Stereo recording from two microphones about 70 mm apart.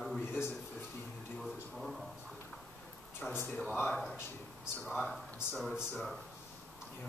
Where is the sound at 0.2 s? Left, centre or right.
Left.